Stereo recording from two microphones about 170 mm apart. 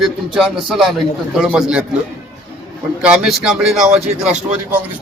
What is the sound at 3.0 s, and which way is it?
Music, 5° right (ahead or behind).